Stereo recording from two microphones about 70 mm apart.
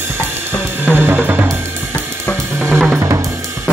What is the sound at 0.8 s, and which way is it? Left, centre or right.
Music, right.